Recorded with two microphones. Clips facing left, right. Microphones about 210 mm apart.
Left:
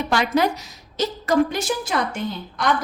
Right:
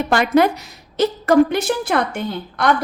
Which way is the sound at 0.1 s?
55° right (ahead or behind).